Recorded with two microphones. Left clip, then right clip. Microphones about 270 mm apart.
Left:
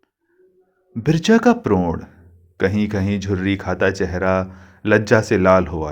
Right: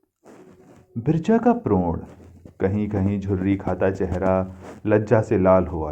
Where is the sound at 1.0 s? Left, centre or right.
Left.